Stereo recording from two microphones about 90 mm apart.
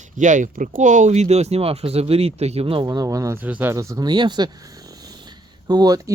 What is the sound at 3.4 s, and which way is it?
Speech, 20° right (ahead or behind).